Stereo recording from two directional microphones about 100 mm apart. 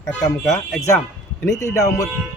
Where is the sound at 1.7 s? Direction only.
30° left (ahead or behind).